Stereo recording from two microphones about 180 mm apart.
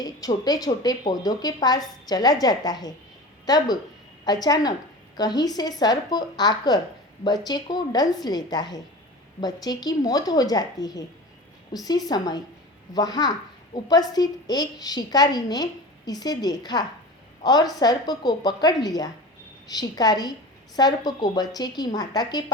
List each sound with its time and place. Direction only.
0.0 s a woman's voice: 20° left (ahead or behind)